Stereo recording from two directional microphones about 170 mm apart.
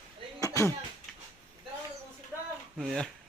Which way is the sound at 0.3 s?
20° left (ahead or behind).